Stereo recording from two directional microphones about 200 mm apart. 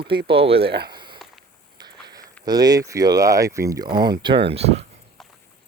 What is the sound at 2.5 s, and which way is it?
Speech, 20° right (ahead or behind).